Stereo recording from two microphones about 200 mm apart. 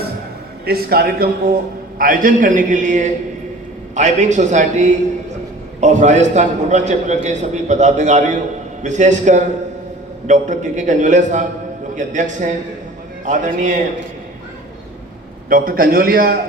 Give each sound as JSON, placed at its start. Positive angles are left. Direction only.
{"t": 0.6, "sound": "a man's voice", "side_deg": -50}
{"t": 15.4, "sound": "a man's voice", "side_deg": -45}